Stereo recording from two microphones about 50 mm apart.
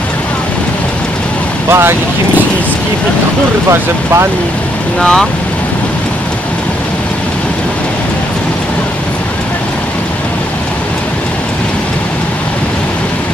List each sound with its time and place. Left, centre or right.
1.7 s speech: right